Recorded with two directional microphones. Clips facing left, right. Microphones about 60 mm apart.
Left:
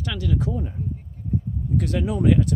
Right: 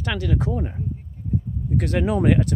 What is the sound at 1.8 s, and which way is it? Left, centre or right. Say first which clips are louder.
Speech: right 3 dB; right.